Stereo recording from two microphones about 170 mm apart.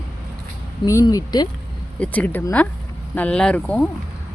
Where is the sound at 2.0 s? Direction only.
10° left (ahead or behind).